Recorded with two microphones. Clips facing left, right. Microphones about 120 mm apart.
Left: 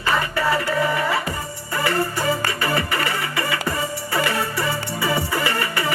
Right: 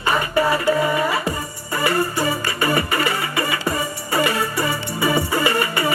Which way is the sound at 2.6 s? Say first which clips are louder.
Right 4 dB; 20° right (ahead or behind).